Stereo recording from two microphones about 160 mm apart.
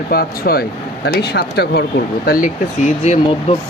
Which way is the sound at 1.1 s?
90° left.